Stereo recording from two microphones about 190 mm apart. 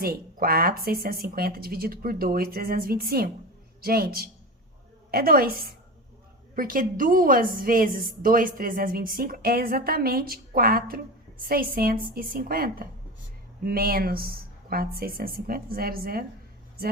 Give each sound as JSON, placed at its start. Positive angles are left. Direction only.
{"t": 0.0, "sound": "a woman's voice", "side_deg": -50}